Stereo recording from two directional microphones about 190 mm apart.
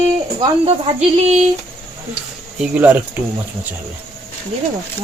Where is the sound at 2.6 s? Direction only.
10° right (ahead or behind).